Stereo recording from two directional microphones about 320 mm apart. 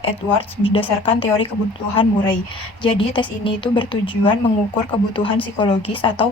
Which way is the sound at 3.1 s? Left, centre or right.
Centre.